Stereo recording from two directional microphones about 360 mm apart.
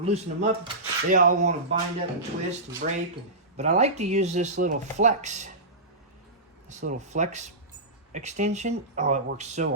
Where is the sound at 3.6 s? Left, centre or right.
Centre.